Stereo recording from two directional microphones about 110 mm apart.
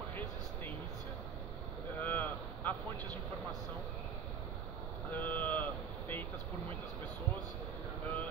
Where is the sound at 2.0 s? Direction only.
15° left (ahead or behind).